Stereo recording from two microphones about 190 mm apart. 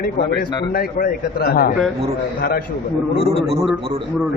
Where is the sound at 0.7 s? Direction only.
50° left (ahead or behind).